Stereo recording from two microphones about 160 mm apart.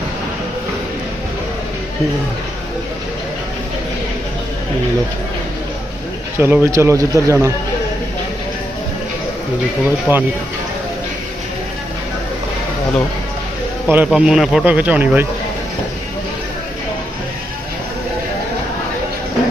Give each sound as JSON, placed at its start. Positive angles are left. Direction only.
{"t": 6.4, "sound": "speech", "side_deg": -15}
{"t": 9.8, "sound": "speech", "side_deg": -10}
{"t": 13.8, "sound": "speech", "side_deg": -10}